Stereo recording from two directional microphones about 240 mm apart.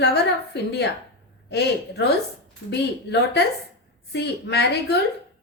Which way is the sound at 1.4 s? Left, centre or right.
Left.